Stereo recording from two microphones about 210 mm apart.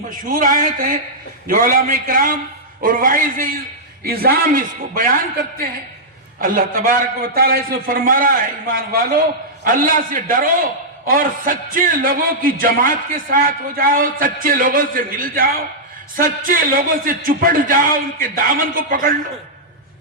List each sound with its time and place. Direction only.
0.2 s a man's voice: 40° right (ahead or behind)